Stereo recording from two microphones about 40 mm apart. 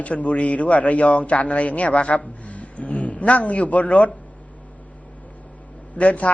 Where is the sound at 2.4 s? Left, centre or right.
Left.